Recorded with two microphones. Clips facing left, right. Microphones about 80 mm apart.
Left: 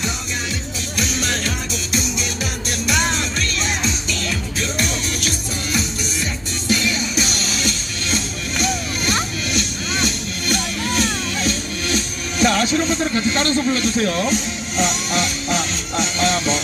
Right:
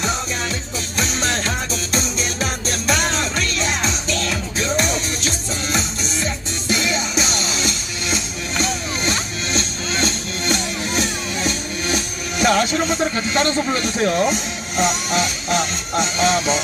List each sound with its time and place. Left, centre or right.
0.9 s music: right
12.4 s a sound: centre
14.8 s music: centre